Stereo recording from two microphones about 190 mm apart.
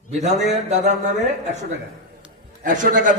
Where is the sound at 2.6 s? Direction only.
45° right (ahead or behind).